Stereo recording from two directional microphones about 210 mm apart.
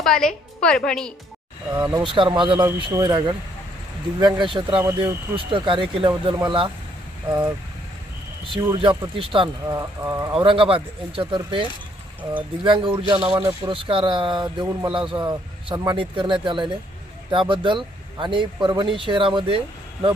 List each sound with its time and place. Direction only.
0.0 s a woman's voice: 5° left (ahead or behind)
1.7 s speech: 15° right (ahead or behind)
5.5 s speech: 25° right (ahead or behind)
8.8 s speech: 25° right (ahead or behind)
10.3 s speech: 25° right (ahead or behind)